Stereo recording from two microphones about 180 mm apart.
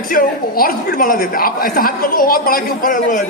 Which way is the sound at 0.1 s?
55° left (ahead or behind).